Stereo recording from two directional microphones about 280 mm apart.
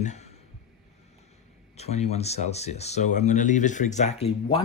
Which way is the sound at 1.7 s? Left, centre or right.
Left.